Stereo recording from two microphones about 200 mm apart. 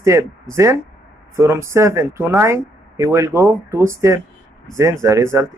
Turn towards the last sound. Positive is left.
turn(degrees=-15)  # may be behind; listen again after turning